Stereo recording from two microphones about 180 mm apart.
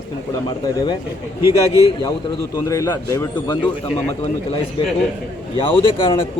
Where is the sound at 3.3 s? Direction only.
25° left (ahead or behind).